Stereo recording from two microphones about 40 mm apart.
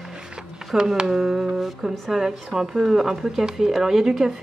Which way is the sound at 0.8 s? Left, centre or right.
Centre.